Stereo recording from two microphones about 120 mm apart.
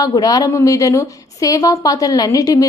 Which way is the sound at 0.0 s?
30° left (ahead or behind).